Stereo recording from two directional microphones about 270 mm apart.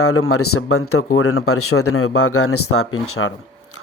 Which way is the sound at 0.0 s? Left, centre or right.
Left.